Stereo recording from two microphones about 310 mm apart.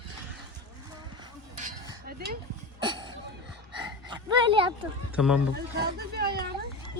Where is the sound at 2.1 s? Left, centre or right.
Right.